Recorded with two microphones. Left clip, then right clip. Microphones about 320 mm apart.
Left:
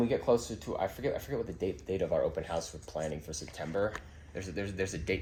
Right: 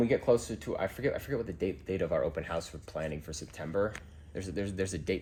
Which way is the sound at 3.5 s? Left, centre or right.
Right.